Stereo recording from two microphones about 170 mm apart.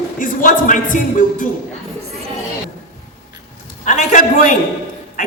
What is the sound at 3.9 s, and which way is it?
Speech, 50° left (ahead or behind).